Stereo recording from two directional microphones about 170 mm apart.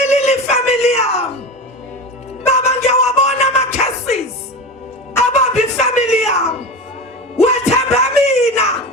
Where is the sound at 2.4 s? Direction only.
40° left (ahead or behind).